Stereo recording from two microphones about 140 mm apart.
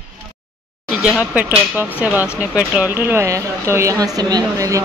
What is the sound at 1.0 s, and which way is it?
A woman's voice, 10° right (ahead or behind).